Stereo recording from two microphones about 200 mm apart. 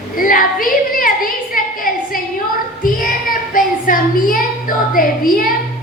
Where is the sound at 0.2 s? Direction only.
45° left (ahead or behind).